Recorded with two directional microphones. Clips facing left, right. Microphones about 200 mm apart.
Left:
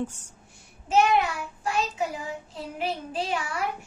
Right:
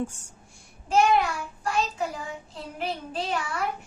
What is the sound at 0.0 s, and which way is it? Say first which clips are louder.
Speech: even; 10° right (ahead or behind).